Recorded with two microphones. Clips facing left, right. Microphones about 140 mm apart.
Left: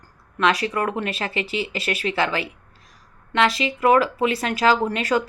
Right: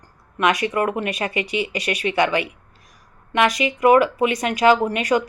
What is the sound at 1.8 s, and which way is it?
Speech, 35° left (ahead or behind).